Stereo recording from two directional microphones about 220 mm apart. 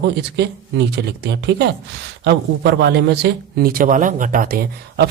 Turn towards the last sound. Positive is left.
turn(degrees=-45)  # may be behind; listen again after turning